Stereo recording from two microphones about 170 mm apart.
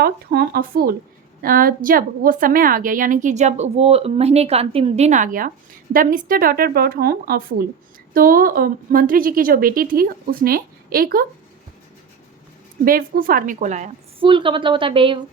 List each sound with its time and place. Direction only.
0.0 s a woman's voice: 65° right (ahead or behind)
12.8 s a woman's voice: 55° right (ahead or behind)
14.2 s a woman's voice: 30° right (ahead or behind)